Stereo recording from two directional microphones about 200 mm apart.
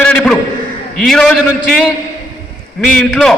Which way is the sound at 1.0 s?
5° left (ahead or behind).